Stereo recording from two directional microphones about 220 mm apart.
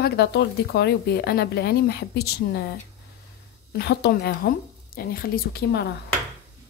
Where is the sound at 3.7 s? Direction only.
45° left (ahead or behind).